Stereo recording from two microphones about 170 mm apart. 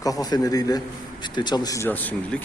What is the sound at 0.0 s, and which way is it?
A man's voice, 20° left (ahead or behind).